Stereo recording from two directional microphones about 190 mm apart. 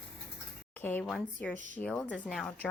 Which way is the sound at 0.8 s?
10° left (ahead or behind).